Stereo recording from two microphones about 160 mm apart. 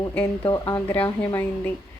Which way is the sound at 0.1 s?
15° left (ahead or behind).